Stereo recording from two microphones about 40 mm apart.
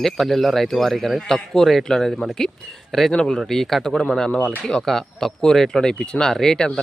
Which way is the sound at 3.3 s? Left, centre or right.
Centre.